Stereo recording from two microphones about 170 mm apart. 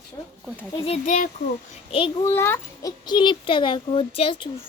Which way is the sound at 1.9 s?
30° left (ahead or behind).